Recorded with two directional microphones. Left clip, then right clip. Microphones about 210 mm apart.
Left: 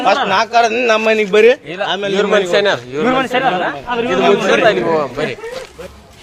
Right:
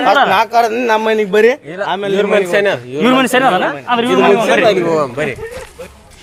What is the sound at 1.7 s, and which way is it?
A man's voice, 30° right (ahead or behind).